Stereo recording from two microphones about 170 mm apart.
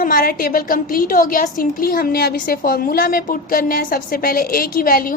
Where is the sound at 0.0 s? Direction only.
55° left (ahead or behind).